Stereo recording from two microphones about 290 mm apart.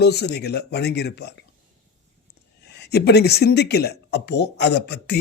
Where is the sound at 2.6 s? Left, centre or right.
Left.